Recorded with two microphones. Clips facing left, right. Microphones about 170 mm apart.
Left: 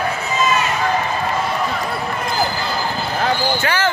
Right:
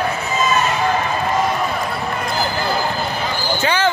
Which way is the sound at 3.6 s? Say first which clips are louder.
Right 4 dB; 20° right (ahead or behind).